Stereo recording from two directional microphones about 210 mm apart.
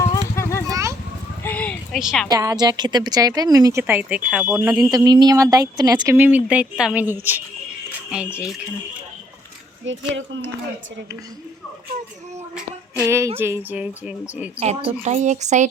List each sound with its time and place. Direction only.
0.0 s vehicle: 15° left (ahead or behind)
0.7 s a sound: 15° right (ahead or behind)
1.5 s a sound: 5° left (ahead or behind)
2.3 s speech: 15° right (ahead or behind)
4.7 s speech: 20° right (ahead or behind)
9.8 s a child's voice: 65° right (ahead or behind)
13.0 s speech: 15° right (ahead or behind)
14.6 s a woman's voice: 30° right (ahead or behind)